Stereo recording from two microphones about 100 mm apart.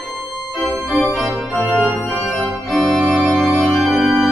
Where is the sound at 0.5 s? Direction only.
Centre (ahead or behind).